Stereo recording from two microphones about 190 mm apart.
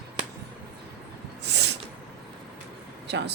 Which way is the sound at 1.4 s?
65° right (ahead or behind).